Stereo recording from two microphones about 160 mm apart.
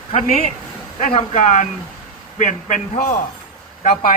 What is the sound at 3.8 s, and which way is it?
Speech, 50° left (ahead or behind).